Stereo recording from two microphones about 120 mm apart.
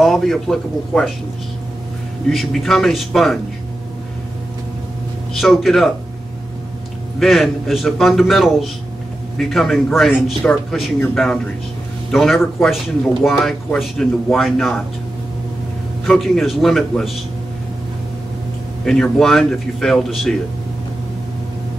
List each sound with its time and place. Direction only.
0.0 s speech: centre (ahead or behind)
2.2 s speech: centre (ahead or behind)
5.3 s speech: centre (ahead or behind)
7.2 s speech: centre (ahead or behind)
12.1 s speech: centre (ahead or behind)
16.1 s speech: centre (ahead or behind)
18.9 s speech: 5° left (ahead or behind)